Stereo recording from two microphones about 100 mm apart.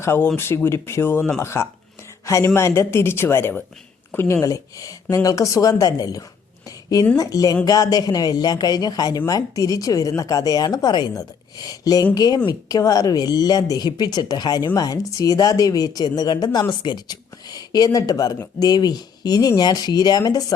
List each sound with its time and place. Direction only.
0.0 s a woman's voice: 25° left (ahead or behind); by 20.4 s 40° left (ahead or behind)